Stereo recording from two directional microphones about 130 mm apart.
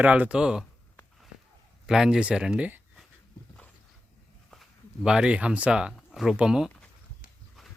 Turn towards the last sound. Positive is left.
turn(degrees=-5)  # may be behind; listen again after turning